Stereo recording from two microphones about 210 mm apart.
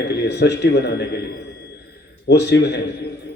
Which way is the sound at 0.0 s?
55° left (ahead or behind).